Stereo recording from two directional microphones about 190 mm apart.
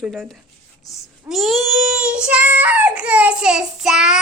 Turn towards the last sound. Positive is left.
turn(degrees=-5)  # may be behind; listen again after turning